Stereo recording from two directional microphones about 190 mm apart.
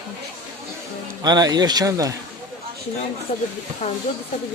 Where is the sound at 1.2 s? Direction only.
20° right (ahead or behind).